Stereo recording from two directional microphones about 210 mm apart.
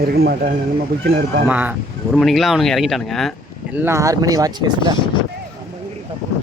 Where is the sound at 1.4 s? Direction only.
10° right (ahead or behind).